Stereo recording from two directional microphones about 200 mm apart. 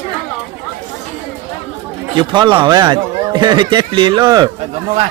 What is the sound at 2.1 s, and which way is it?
Speech, 20° right (ahead or behind).